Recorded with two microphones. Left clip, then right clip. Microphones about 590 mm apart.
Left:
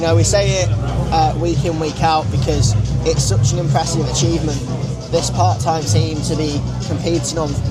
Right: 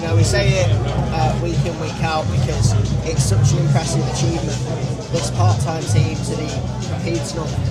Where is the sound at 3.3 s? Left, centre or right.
Left.